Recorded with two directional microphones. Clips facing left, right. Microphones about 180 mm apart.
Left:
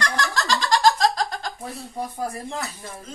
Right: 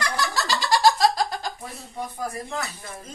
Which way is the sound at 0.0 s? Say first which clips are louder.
Left 1 dB; 5° right (ahead or behind).